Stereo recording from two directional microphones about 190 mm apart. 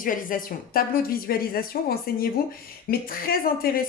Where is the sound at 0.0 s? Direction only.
45° left (ahead or behind).